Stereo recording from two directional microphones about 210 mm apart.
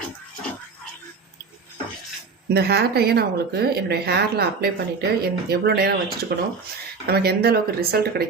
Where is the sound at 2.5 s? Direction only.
50° right (ahead or behind).